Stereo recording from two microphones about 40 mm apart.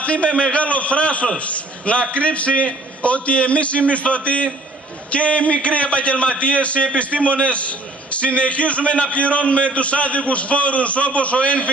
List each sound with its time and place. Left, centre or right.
0.0 s a man's voice: left